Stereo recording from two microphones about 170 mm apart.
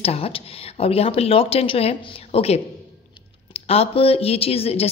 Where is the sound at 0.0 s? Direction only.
35° left (ahead or behind).